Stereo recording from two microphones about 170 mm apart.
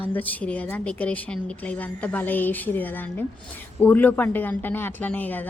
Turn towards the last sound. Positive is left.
turn(degrees=10)  # may be behind; listen again after turning